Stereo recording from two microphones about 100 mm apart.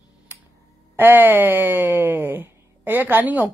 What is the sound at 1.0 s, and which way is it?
Speech, 20° right (ahead or behind).